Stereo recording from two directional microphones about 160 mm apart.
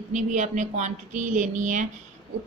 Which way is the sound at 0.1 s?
50° right (ahead or behind).